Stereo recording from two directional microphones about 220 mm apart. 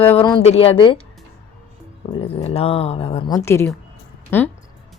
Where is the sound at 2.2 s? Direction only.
25° left (ahead or behind).